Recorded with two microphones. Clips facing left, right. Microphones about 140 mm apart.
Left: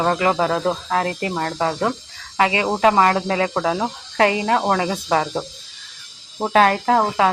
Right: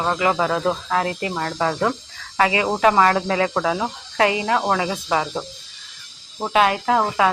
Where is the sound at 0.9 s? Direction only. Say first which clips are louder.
Left 1 dB; 35° left (ahead or behind).